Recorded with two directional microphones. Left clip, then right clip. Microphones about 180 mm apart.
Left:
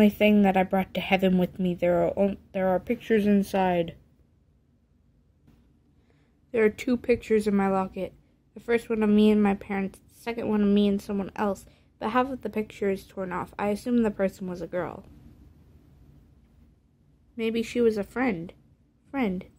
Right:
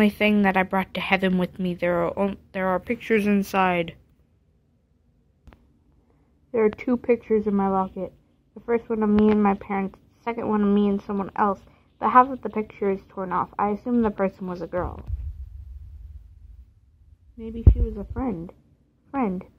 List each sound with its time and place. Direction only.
0.0 s a woman's voice: centre (ahead or behind)
6.8 s a woman's voice: 5° left (ahead or behind)
7.2 s a woman's voice: 15° left (ahead or behind)
10.1 s a sound: centre (ahead or behind)
10.4 s a woman's voice: 10° left (ahead or behind)
17.9 s a woman's voice: 15° left (ahead or behind)